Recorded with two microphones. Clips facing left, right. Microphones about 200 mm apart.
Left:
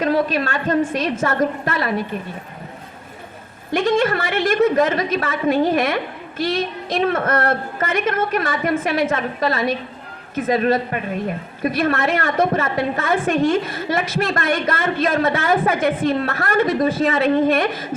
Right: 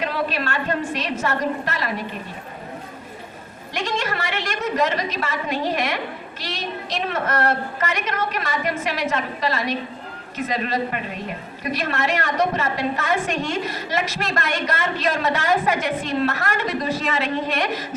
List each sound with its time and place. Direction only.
0.0 s a woman's voice: 45° left (ahead or behind)
3.7 s a woman's voice: 50° left (ahead or behind)